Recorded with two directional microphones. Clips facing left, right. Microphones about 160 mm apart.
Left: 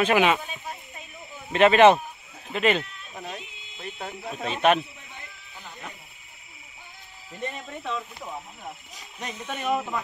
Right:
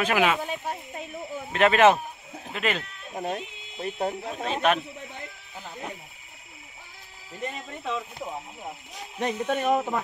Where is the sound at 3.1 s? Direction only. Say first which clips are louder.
Right 7 dB; 45° right (ahead or behind).